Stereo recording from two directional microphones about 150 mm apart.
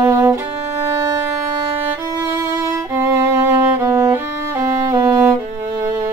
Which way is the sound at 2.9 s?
20° right (ahead or behind).